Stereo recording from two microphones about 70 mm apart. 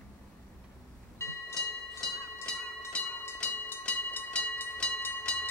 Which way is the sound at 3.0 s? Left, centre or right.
Left.